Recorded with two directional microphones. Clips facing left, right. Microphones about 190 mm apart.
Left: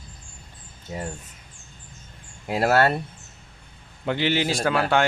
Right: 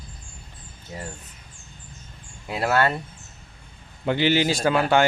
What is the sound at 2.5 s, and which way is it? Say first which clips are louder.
Speech: left 2 dB; 40° left (ahead or behind).